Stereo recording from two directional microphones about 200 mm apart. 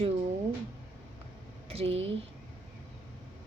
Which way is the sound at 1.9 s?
70° right (ahead or behind).